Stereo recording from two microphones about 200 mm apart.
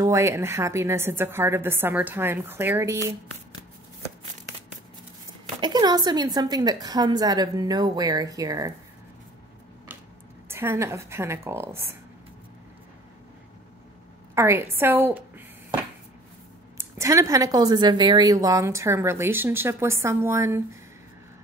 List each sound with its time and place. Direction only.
0.0 s a woman's voice: 15° right (ahead or behind)
5.6 s a woman's voice: 20° right (ahead or behind)
10.5 s a woman's voice: 10° right (ahead or behind)
14.3 s a sound: 15° right (ahead or behind)
16.7 s a woman's voice: 15° right (ahead or behind)